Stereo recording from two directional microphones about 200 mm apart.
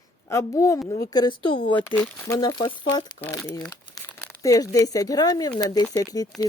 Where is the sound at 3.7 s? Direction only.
20° left (ahead or behind).